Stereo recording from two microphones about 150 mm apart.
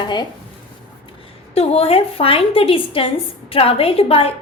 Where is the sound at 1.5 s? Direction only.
40° left (ahead or behind).